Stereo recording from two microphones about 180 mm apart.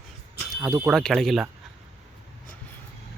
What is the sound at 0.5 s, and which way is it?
Speech, 20° right (ahead or behind).